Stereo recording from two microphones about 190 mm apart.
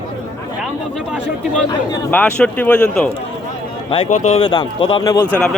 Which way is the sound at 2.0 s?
10° left (ahead or behind).